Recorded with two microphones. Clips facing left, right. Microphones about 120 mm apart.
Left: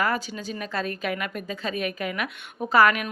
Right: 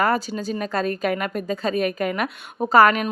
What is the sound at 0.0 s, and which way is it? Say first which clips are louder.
A woman's voice: right 5 dB; 40° right (ahead or behind).